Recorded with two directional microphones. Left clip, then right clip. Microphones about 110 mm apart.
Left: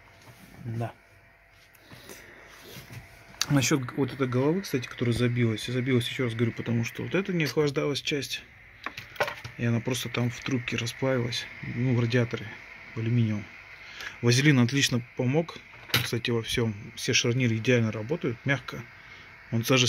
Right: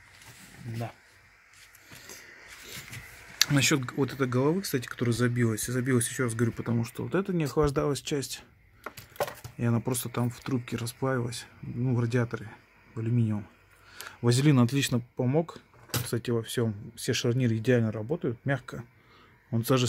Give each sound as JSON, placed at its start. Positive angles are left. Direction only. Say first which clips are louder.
{"t": 3.3, "sound": "speech", "louder": "right 1 dB", "side_deg": 0}
{"t": 7.5, "sound": "speech", "louder": "right 1 dB", "side_deg": -30}
{"t": 9.6, "sound": "speech", "louder": "right 1 dB", "side_deg": -25}
{"t": 9.8, "sound": "speech", "louder": "left 2 dB", "side_deg": -15}
{"t": 11.1, "sound": "speech", "louder": "left 2 dB", "side_deg": 10}
{"t": 14.0, "sound": "speech", "louder": "left 3 dB", "side_deg": -10}
{"t": 16.1, "sound": "speech", "louder": "left 2 dB", "side_deg": -10}